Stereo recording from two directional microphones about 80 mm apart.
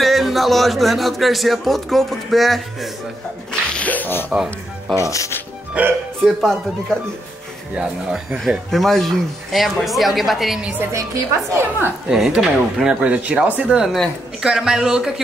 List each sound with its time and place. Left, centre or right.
0.0 s speech: centre
3.7 s music: centre
5.8 s speech: centre
6.2 s speech: centre
7.7 s speech: centre
10.8 s a woman's voice: right
12.1 s speech: centre
13.0 s speech: centre